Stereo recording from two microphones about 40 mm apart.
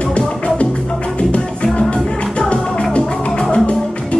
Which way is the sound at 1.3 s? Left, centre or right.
Left.